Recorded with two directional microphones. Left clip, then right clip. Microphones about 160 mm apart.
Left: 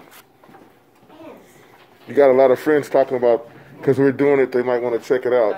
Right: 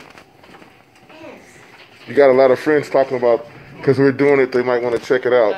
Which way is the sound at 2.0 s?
15° left (ahead or behind).